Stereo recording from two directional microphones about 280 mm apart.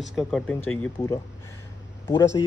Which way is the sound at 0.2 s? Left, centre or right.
Centre.